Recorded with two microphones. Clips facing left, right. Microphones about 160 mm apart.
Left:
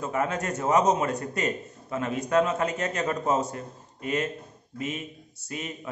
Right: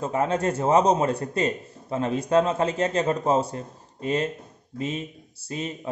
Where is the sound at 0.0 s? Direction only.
30° right (ahead or behind).